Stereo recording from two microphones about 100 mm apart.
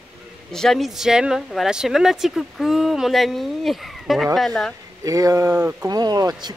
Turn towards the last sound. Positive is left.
turn(degrees=-40)  # may be behind; listen again after turning